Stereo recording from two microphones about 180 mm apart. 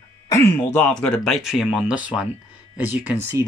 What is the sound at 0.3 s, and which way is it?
Speech, 15° left (ahead or behind).